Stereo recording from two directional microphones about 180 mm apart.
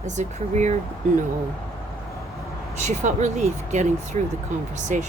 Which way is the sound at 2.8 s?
40° right (ahead or behind).